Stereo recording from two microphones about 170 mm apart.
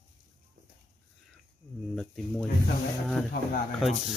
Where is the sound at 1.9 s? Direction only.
5° left (ahead or behind).